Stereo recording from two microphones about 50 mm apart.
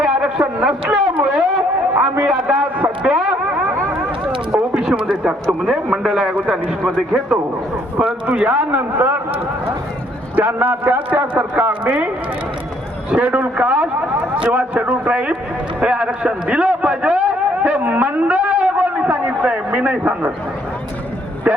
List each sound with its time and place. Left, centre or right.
0.0 s a sound: right
1.2 s a man's voice: centre
3.0 s effects unit: centre
4.5 s a sound: centre
5.7 s a man's voice: centre
7.9 s a man's voice: right
9.0 s speech: right
10.3 s a man's voice: right
13.1 s a man's voice: right